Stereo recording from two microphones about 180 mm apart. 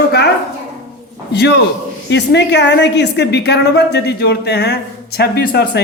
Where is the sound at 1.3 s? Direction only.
65° left (ahead or behind).